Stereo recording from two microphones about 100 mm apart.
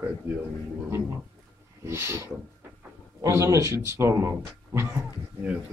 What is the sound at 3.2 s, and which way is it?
Speech, 30° right (ahead or behind).